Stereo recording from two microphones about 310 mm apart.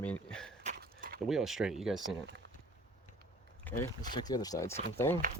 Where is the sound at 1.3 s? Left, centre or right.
Centre.